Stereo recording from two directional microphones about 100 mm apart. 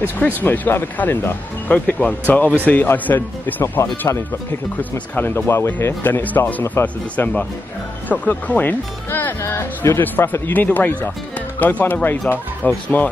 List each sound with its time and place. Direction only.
0.2 s speech: 20° left (ahead or behind)